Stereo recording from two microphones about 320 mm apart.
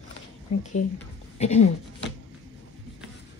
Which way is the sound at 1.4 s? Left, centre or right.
Centre.